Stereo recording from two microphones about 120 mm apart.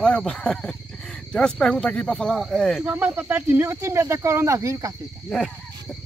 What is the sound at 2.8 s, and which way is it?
Speech, 15° right (ahead or behind).